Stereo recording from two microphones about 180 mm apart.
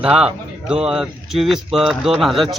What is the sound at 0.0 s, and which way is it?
Speech, 5° right (ahead or behind).